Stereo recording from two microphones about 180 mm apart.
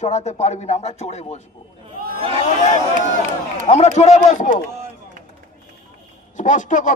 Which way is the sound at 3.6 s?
40° left (ahead or behind).